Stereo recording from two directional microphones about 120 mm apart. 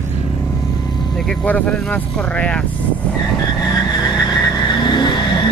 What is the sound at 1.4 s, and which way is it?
Speech, 10° left (ahead or behind).